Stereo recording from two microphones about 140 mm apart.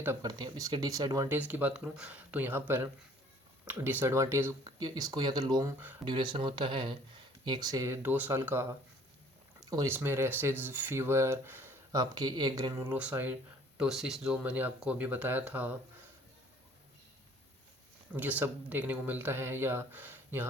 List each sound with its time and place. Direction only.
0.2 s speech: 30° right (ahead or behind)
1.4 s speech: 10° right (ahead or behind)
8.0 s speech: 15° right (ahead or behind)
9.6 s a sound: 25° right (ahead or behind)
9.9 s speech: 15° right (ahead or behind)
18.1 s speech: 10° right (ahead or behind)